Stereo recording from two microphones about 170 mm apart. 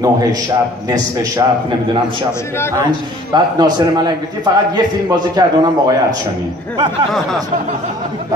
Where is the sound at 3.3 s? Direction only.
25° right (ahead or behind).